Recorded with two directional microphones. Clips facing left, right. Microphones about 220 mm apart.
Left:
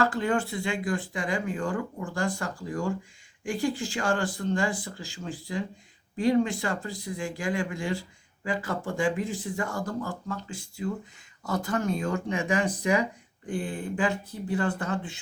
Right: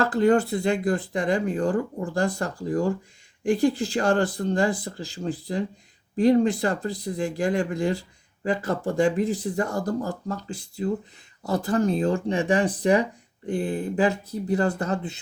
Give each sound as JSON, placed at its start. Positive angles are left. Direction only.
{"t": 0.0, "sound": "speech", "side_deg": -40}